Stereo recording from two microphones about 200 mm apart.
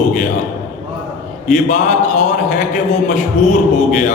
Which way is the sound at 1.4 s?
40° left (ahead or behind).